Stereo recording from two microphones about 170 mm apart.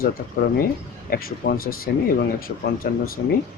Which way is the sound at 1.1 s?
60° left (ahead or behind).